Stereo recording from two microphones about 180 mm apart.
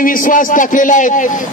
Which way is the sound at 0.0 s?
45° left (ahead or behind).